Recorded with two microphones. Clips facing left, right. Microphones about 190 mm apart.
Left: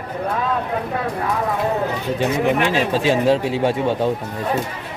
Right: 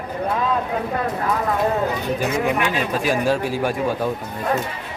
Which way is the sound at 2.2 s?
25° left (ahead or behind).